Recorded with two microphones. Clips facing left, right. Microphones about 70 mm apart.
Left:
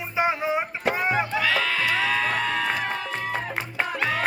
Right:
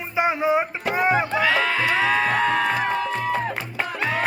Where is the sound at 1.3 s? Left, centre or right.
Right.